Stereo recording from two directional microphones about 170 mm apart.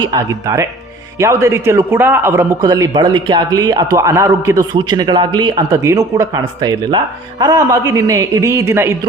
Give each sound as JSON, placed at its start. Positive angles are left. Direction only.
{"t": 0.0, "sound": "a man's voice", "side_deg": -20}